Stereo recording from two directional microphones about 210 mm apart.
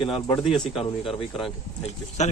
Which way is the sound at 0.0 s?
25° left (ahead or behind).